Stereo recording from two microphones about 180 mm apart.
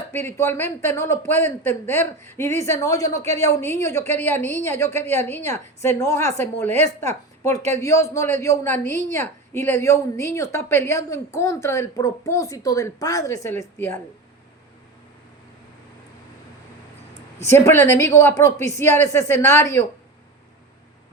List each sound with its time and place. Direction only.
0.1 s a woman's voice: 15° left (ahead or behind)
17.4 s a woman's voice: 15° left (ahead or behind)